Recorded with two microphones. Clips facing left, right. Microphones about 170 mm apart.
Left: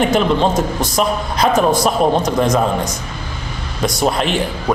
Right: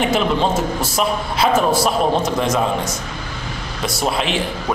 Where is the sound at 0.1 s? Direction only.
5° right (ahead or behind).